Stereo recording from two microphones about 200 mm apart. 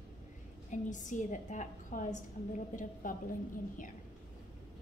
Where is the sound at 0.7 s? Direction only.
40° left (ahead or behind).